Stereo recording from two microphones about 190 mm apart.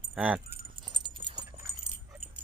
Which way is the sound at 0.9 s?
25° right (ahead or behind).